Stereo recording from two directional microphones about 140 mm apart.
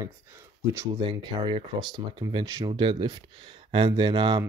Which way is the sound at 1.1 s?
35° right (ahead or behind).